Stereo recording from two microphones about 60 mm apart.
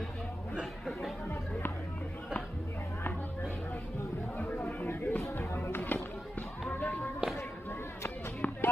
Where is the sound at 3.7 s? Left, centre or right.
Left.